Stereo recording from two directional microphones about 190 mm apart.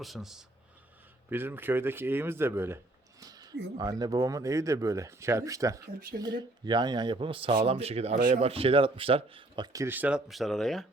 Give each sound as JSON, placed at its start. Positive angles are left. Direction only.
{"t": 0.0, "sound": "speech", "side_deg": 0}
{"t": 3.2, "sound": "a sound", "side_deg": -20}
{"t": 3.8, "sound": "speech", "side_deg": -20}
{"t": 9.7, "sound": "speech", "side_deg": -10}